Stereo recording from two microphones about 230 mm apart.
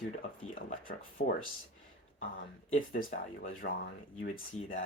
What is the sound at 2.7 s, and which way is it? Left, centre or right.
Speech, left.